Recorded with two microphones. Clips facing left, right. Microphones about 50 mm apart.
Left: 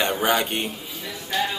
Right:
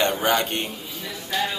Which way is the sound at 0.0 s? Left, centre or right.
Centre.